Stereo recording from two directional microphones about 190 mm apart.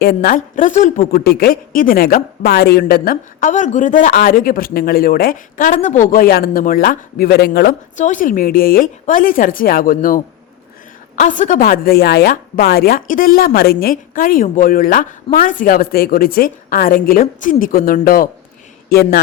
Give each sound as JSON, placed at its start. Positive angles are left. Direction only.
{"t": 0.0, "sound": "a woman's voice", "side_deg": 50}